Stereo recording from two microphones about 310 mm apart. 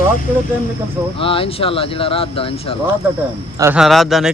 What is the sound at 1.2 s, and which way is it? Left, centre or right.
Speech, centre.